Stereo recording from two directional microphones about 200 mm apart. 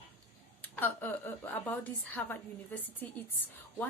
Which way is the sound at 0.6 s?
10° left (ahead or behind).